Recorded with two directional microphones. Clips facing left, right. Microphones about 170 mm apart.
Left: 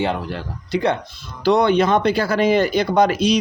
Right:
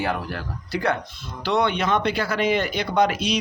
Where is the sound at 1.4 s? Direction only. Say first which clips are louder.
Left 7 dB; 40° left (ahead or behind).